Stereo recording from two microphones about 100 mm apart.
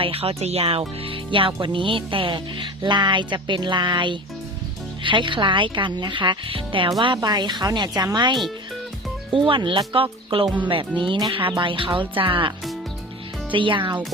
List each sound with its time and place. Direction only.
0.0 s a woman's voice: 70° right (ahead or behind)
7.2 s a woman's voice: 45° right (ahead or behind)
9.5 s speech: 60° right (ahead or behind)